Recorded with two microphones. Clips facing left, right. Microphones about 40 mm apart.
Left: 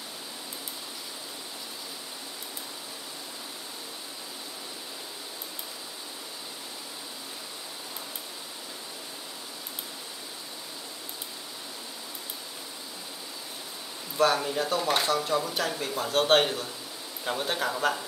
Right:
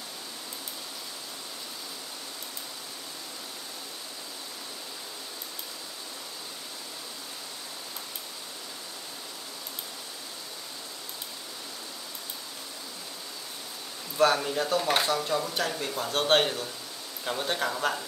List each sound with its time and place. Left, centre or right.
14.1 s speech: centre